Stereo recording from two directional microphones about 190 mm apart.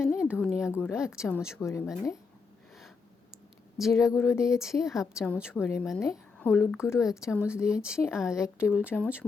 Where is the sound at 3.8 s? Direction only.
Centre (ahead or behind).